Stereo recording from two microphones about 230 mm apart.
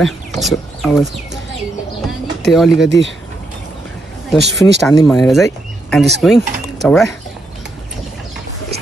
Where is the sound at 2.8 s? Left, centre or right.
Left.